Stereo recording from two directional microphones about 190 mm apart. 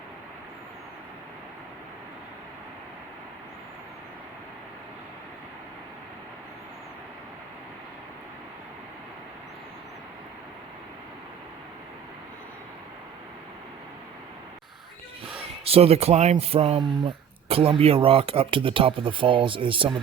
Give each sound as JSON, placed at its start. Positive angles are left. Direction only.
{"t": 15.4, "sound": "speech", "side_deg": -30}